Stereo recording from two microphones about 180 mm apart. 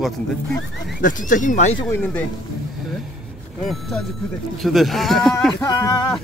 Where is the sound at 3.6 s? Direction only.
Centre (ahead or behind).